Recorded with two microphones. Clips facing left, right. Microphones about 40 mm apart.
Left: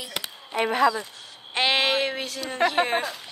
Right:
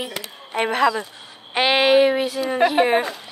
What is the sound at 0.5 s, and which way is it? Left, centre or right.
Speech, right.